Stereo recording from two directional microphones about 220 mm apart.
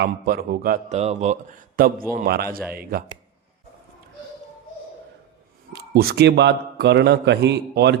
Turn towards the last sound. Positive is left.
turn(degrees=-50)  # may be behind; listen again after turning